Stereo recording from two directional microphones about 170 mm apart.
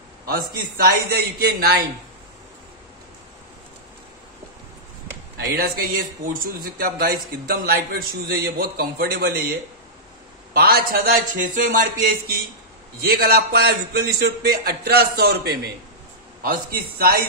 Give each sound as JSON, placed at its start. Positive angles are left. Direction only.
{"t": 0.3, "sound": "speech", "side_deg": -60}
{"t": 5.5, "sound": "speech", "side_deg": -60}
{"t": 13.0, "sound": "a man's voice", "side_deg": -65}